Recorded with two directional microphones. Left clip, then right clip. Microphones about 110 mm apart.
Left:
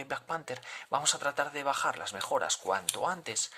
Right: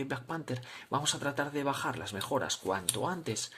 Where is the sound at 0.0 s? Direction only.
35° left (ahead or behind).